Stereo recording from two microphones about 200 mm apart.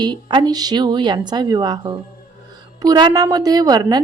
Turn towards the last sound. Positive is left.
turn(degrees=-20)  # may be behind; listen again after turning